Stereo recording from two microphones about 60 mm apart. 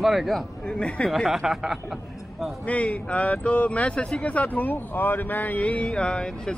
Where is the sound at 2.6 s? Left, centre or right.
Left.